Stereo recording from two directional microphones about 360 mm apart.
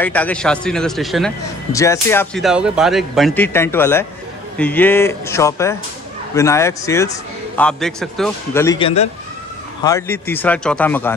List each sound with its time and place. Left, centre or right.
0.0 s a man's voice: centre